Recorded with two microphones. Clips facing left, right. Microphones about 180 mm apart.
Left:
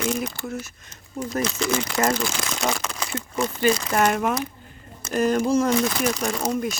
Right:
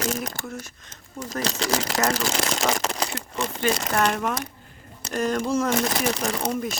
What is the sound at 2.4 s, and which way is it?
Crumpling, 40° right (ahead or behind).